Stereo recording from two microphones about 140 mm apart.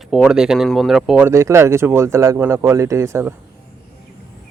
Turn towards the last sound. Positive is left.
turn(degrees=-20)  # may be behind; listen again after turning